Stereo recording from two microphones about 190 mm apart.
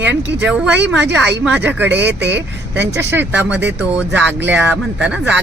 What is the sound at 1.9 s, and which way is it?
Speech, 65° right (ahead or behind).